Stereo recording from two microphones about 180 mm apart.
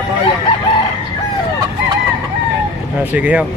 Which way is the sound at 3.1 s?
5° right (ahead or behind).